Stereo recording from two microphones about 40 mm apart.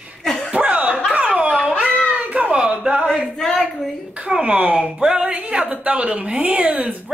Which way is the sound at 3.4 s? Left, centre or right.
Centre.